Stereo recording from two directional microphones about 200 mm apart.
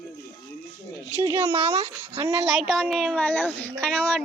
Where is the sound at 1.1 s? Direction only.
10° right (ahead or behind).